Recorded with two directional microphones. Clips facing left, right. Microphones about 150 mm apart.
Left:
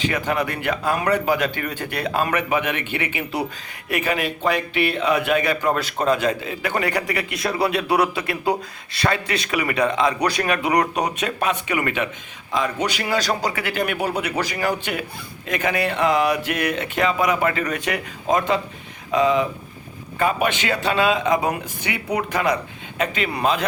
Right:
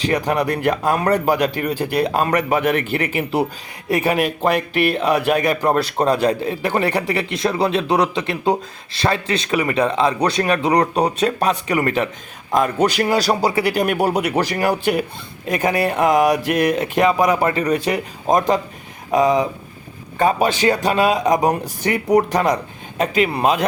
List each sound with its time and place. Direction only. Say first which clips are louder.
0.0 s a man's voice: right 4 dB; 40° right (ahead or behind)